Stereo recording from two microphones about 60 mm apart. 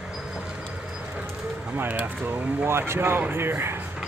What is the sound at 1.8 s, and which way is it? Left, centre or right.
Speech, right.